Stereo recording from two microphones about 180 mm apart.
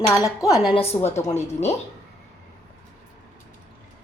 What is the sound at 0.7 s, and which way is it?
Speech, 35° left (ahead or behind).